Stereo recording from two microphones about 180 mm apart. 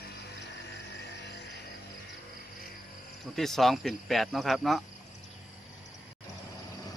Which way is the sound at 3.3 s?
Centre (ahead or behind).